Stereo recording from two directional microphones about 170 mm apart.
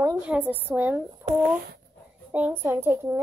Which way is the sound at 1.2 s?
30° right (ahead or behind).